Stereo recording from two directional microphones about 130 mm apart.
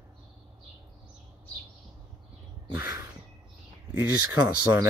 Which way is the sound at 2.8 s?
20° right (ahead or behind).